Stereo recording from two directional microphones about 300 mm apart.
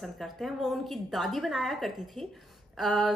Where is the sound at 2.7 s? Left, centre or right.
Centre.